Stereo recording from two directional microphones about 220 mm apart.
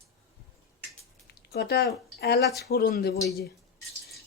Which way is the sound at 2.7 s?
40° left (ahead or behind).